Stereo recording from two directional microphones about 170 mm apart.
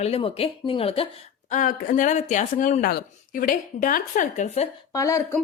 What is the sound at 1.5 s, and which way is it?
Speech, 55° left (ahead or behind).